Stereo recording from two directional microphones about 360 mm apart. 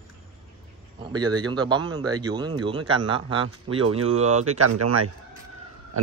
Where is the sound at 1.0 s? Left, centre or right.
Centre.